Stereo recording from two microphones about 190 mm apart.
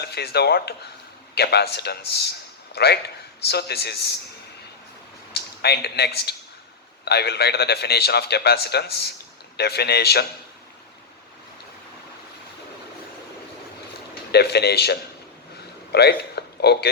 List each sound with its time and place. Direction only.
0.0 s a man's voice: 60° left (ahead or behind)
5.3 s a man's voice: 60° left (ahead or behind)
14.3 s a man's voice: 60° left (ahead or behind)